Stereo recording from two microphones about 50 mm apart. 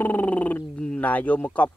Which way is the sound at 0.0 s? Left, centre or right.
Left.